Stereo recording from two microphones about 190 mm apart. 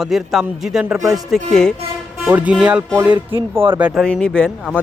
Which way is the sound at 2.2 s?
5° right (ahead or behind).